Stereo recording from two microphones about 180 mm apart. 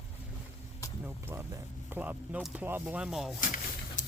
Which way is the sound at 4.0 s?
45° left (ahead or behind).